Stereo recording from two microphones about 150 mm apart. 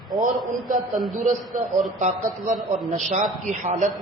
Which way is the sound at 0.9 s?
Centre (ahead or behind).